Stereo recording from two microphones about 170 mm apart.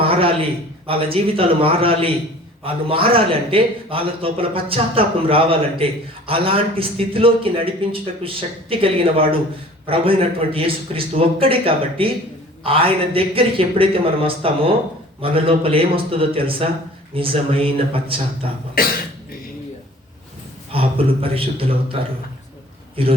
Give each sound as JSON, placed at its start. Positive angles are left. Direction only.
{"t": 0.0, "sound": "a sound", "side_deg": -35}
{"t": 0.9, "sound": "a man's voice", "side_deg": -35}
{"t": 18.8, "sound": "cough", "side_deg": 60}
{"t": 20.7, "sound": "a man's voice", "side_deg": -35}
{"t": 23.0, "sound": "a man's voice", "side_deg": -35}